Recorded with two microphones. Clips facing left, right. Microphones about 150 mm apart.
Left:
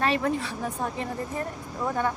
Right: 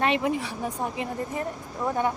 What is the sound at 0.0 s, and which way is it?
Speech, 15° right (ahead or behind).